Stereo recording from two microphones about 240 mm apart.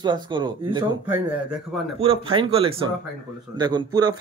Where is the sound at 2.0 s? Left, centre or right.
Right.